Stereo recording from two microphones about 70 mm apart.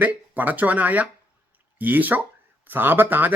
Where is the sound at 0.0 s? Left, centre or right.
Right.